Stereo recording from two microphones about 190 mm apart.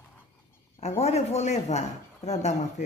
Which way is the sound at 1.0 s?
35° left (ahead or behind).